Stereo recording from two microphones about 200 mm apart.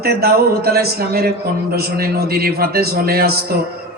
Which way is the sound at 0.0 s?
50° right (ahead or behind).